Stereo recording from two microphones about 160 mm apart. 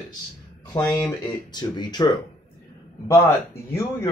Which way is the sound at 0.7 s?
10° left (ahead or behind).